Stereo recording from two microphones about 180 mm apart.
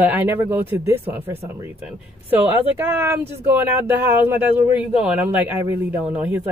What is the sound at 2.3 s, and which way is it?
Speech, 10° right (ahead or behind).